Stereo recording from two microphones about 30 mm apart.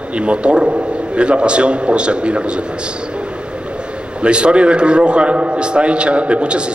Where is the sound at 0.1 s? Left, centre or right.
Right.